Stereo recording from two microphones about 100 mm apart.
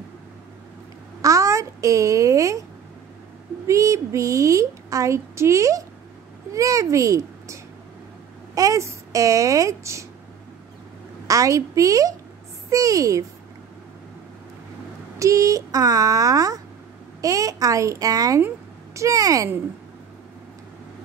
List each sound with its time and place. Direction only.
1.2 s a child's voice: 35° right (ahead or behind)
3.6 s a woman's voice: 30° right (ahead or behind)
8.5 s a woman's voice: 30° right (ahead or behind)
11.2 s a woman's voice: 35° right (ahead or behind)
15.1 s a woman's voice: 35° right (ahead or behind)